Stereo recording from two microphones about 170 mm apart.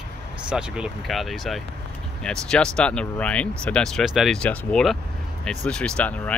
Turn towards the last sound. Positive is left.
turn(degrees=10)  # may be behind; listen again after turning